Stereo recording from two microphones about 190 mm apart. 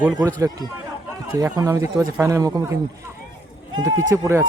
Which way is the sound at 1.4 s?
15° right (ahead or behind).